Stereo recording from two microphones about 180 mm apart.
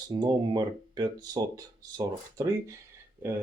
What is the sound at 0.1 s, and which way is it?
Speech, 25° right (ahead or behind).